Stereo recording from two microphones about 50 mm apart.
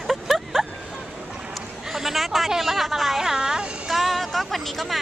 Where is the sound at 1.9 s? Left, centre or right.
Centre.